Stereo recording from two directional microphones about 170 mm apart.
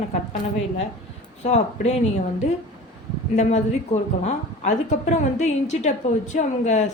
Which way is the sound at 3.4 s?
40° left (ahead or behind).